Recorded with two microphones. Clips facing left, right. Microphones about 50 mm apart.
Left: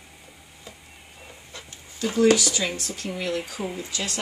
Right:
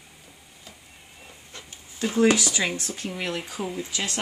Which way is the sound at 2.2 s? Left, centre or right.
Right.